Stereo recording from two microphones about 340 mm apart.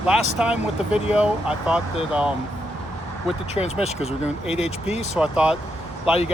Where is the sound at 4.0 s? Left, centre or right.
Centre.